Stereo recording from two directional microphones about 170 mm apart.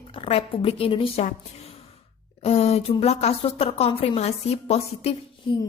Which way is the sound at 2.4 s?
35° left (ahead or behind).